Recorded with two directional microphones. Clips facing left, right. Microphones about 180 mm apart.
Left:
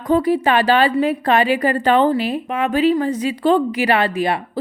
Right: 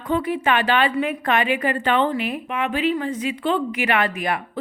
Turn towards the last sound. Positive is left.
turn(degrees=30)  # may be behind; listen again after turning